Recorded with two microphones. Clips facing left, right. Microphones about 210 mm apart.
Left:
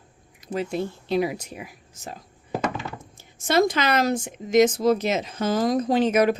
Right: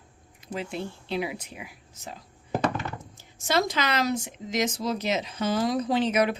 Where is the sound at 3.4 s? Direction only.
50° left (ahead or behind).